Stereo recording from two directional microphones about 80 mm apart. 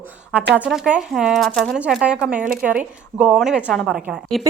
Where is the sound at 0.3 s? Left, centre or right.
Centre.